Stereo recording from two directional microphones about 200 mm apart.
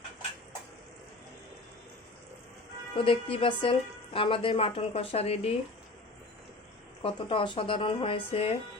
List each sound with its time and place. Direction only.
3.0 s a woman's voice: 25° left (ahead or behind)
7.0 s a woman's voice: 25° left (ahead or behind)